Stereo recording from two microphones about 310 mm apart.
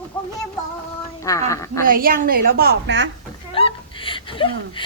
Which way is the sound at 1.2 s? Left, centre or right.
Centre.